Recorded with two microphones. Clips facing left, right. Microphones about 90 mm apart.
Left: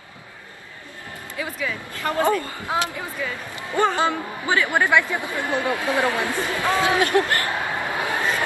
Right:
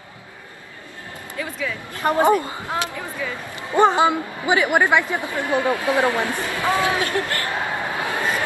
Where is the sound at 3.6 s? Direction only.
20° right (ahead or behind).